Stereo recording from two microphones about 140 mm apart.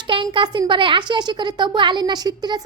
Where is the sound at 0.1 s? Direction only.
35° right (ahead or behind).